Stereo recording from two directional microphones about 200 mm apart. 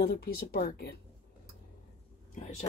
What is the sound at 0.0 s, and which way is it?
Speech, 50° left (ahead or behind).